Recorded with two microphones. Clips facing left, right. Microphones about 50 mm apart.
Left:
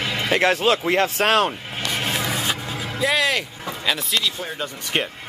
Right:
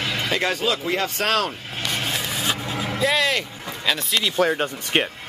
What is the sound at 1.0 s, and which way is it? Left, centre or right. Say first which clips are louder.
Speech: left 4 dB; left.